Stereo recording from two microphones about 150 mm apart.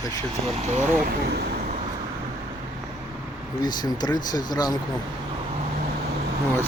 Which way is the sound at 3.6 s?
25° left (ahead or behind).